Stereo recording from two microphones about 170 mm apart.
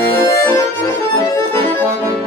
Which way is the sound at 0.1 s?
15° left (ahead or behind).